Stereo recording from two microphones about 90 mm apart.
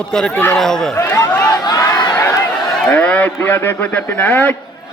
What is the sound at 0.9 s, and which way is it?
Speech, 30° left (ahead or behind).